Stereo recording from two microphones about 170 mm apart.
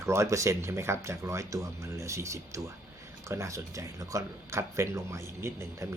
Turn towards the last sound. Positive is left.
turn(degrees=-15)  # may be behind; listen again after turning